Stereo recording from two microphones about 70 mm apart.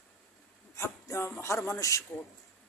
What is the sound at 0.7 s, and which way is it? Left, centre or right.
A woman's voice, left.